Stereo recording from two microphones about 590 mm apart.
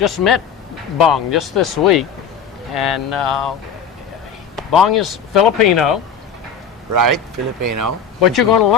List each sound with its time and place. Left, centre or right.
0.0 s speech: left
4.5 s a sound: centre
4.9 s speech: left
6.9 s speech: right
8.2 s speech: left